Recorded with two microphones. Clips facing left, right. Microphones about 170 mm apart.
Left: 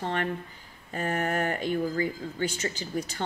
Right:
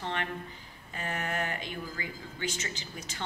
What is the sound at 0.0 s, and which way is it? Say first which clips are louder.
A woman's voice: left 5 dB; 45° left (ahead or behind).